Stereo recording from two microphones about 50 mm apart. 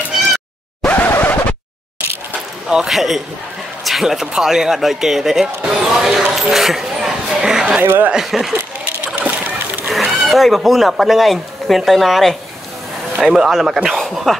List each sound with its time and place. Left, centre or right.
1.1 s scratch: left
2.7 s speech: centre
6.5 s a sound: centre
7.8 s speech: right
8.1 s speech: centre
9.0 s a sound: right
9.8 s speech: centre